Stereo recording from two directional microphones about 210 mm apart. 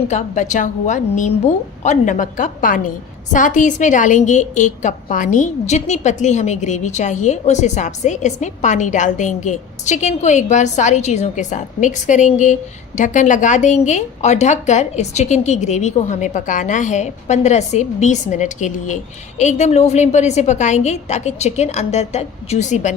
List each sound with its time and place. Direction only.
0.1 s a woman's voice: 35° left (ahead or behind)